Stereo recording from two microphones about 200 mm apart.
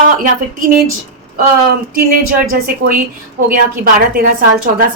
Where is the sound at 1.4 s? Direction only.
50° right (ahead or behind).